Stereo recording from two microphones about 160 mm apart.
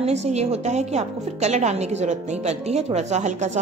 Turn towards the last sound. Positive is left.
turn(degrees=-45)  # may be behind; listen again after turning